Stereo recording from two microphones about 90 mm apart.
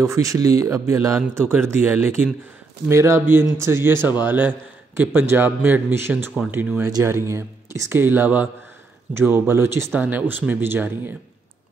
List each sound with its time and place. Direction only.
0.0 s a man's voice: 35° right (ahead or behind)
9.9 s a man's voice: 20° right (ahead or behind)